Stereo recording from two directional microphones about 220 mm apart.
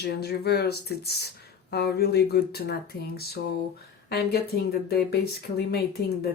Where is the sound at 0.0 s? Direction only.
50° left (ahead or behind).